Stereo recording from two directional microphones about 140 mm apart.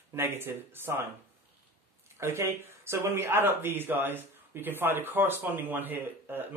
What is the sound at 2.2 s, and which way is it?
Speech, 20° right (ahead or behind).